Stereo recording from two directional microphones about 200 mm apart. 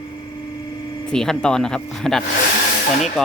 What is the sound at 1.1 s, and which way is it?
Speech, 5° left (ahead or behind).